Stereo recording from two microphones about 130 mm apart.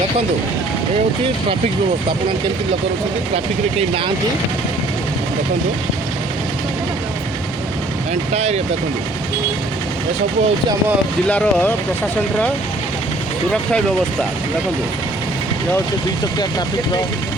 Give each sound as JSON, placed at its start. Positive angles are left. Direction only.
{"t": 3.3, "sound": "speech", "side_deg": -50}
{"t": 8.1, "sound": "speech", "side_deg": -60}
{"t": 11.3, "sound": "speech", "side_deg": 10}